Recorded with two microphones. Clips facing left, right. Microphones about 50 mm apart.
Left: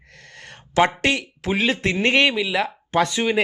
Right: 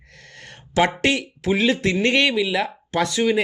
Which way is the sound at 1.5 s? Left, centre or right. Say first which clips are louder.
Right 2 dB; centre.